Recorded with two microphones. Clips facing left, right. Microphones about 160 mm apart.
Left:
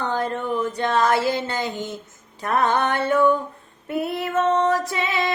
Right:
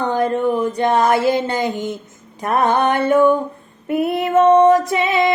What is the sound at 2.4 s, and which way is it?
Female singing, 15° right (ahead or behind).